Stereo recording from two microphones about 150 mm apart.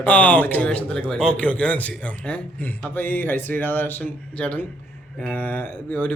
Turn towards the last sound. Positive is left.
turn(degrees=10)  # may be behind; listen again after turning